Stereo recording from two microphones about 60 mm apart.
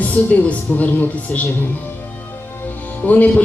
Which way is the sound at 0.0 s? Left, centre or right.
Left.